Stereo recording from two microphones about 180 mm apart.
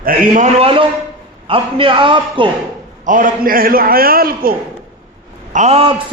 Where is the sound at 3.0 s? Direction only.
50° right (ahead or behind).